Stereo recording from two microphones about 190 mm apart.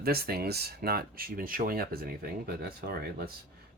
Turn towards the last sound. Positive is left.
turn(degrees=-55)  # may be behind; listen again after turning